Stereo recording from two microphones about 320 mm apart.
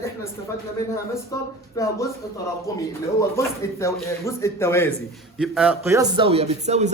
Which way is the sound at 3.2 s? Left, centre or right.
Centre.